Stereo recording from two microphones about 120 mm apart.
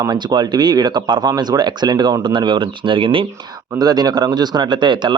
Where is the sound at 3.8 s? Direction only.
35° right (ahead or behind).